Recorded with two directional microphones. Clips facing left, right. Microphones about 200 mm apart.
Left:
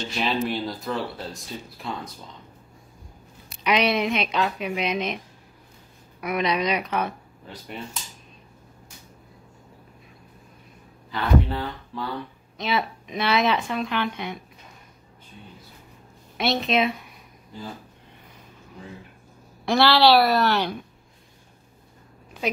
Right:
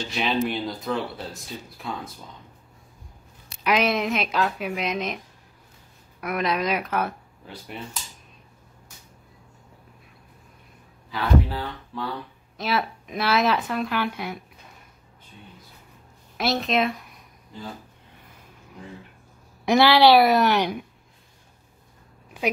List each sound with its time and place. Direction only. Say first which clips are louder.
0.1 s speech: right 1 dB; centre (ahead or behind)
3.6 s speech: even; centre (ahead or behind)
6.2 s speech: left 1 dB; centre (ahead or behind)
11.1 s speech: left 1 dB; centre (ahead or behind)
16.3 s speech: left 1 dB; centre (ahead or behind)
19.6 s a woman's voice: right 2 dB; 15° right (ahead or behind)